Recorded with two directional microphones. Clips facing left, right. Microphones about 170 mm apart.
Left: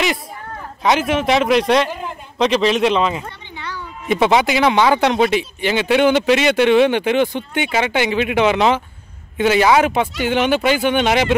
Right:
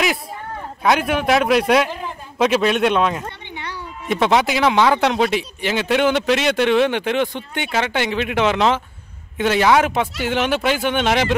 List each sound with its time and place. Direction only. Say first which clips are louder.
0.8 s speech: left 1 dB; centre (ahead or behind)
3.5 s a sound: left 3 dB; 15° right (ahead or behind)
4.1 s speech: left 2 dB; centre (ahead or behind)